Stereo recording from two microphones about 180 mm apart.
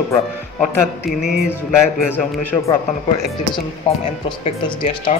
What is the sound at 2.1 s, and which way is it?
Speech, 10° left (ahead or behind).